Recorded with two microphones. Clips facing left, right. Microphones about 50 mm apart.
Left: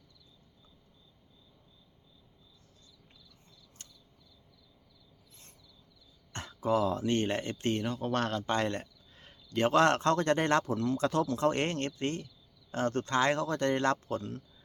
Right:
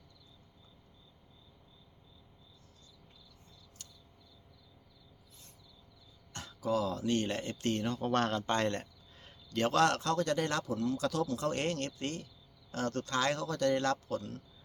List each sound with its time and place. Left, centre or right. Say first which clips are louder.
3.8 s cricket: left 1 dB; left
6.3 s speech: left 4 dB; left
7.9 s speech: even; centre
9.6 s speech: left 3 dB; left